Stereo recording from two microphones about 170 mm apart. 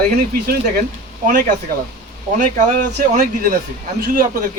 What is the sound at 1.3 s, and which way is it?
A man's voice, 55° right (ahead or behind).